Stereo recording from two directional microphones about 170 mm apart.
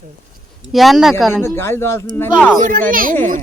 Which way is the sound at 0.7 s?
Centre (ahead or behind).